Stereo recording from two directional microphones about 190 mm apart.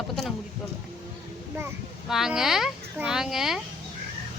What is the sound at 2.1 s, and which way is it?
Speech, centre (ahead or behind).